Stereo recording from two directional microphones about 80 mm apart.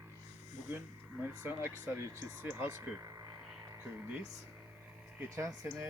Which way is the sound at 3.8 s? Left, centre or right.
Right.